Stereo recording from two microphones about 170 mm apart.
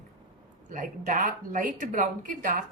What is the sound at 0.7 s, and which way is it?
Speech, 50° right (ahead or behind).